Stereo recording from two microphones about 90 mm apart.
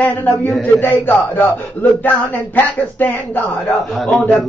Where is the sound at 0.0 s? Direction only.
20° left (ahead or behind).